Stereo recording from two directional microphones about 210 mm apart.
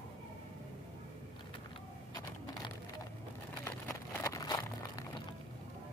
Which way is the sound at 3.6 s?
15° left (ahead or behind).